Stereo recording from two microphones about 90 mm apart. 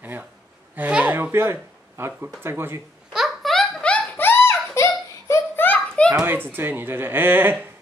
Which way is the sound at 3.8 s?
20° left (ahead or behind).